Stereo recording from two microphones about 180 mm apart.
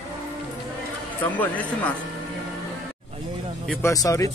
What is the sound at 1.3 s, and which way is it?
Speech, 10° left (ahead or behind).